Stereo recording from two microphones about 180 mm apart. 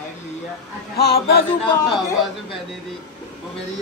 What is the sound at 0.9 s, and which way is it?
Speech, 60° left (ahead or behind).